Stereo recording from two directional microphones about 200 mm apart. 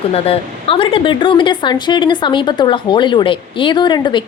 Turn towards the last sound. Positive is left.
turn(degrees=20)  # may be behind; listen again after turning